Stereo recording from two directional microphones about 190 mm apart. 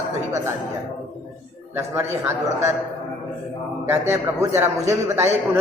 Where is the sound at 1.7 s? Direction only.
10° right (ahead or behind).